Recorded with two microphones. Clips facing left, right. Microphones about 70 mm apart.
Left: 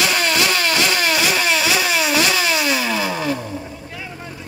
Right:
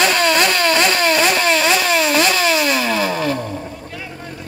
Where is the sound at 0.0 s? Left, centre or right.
Right.